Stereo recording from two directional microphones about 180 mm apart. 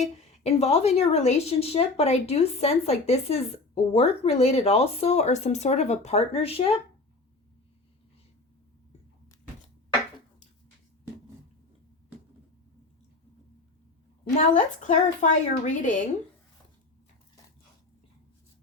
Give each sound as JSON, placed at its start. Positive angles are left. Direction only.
{"t": 0.0, "sound": "speech", "side_deg": 40}
{"t": 14.8, "sound": "a woman's voice", "side_deg": 45}